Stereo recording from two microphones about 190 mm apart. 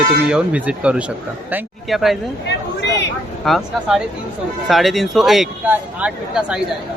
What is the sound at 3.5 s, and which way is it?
A man's voice, centre (ahead or behind).